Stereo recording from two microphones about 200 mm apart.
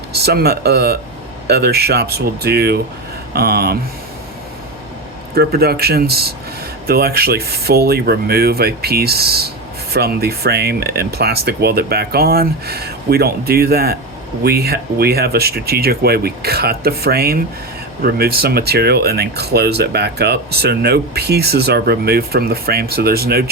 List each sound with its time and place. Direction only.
0.2 s speech: 50° right (ahead or behind)
5.3 s speech: 50° right (ahead or behind)